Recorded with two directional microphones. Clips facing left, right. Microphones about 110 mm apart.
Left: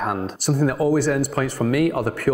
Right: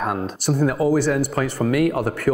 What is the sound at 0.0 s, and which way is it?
Speech, 25° right (ahead or behind).